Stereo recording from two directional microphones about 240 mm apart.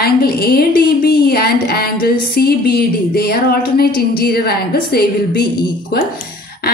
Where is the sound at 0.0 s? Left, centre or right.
Left.